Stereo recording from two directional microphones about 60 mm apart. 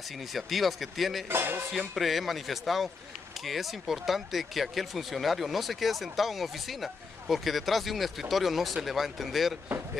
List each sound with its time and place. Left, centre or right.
0.3 s speech: centre
1.3 s music: right
1.7 s speech: centre